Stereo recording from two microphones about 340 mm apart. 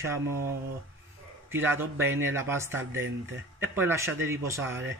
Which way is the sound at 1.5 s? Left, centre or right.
Centre.